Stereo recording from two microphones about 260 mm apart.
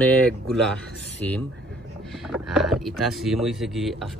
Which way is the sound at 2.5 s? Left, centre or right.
Centre.